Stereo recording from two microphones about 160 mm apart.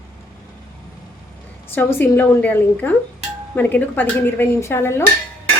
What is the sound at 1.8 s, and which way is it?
A woman's voice, 10° left (ahead or behind).